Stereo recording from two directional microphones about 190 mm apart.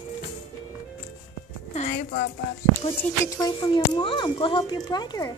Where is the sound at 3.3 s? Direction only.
20° left (ahead or behind).